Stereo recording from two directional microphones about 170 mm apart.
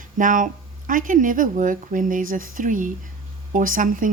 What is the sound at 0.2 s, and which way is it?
Speech, 50° right (ahead or behind).